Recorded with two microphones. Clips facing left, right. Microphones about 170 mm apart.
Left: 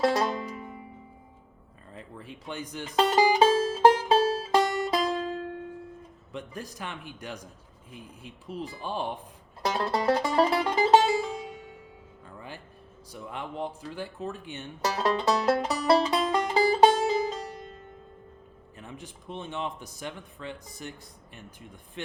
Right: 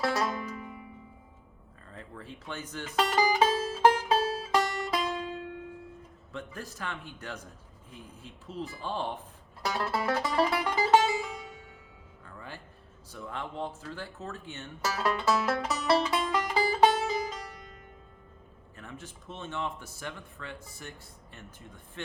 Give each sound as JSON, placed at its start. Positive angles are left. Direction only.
{"t": 0.0, "sound": "music", "side_deg": 25}
{"t": 1.9, "sound": "speech", "side_deg": 15}
{"t": 3.0, "sound": "music", "side_deg": 25}
{"t": 6.3, "sound": "speech", "side_deg": 15}
{"t": 9.6, "sound": "music", "side_deg": 30}
{"t": 13.1, "sound": "speech", "side_deg": 15}
{"t": 14.9, "sound": "music", "side_deg": 25}
{"t": 18.8, "sound": "speech", "side_deg": 15}
{"t": 22.0, "sound": "speech", "side_deg": 15}